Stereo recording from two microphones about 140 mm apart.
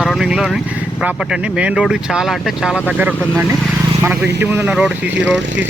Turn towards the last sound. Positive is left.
turn(degrees=-10)  # may be behind; listen again after turning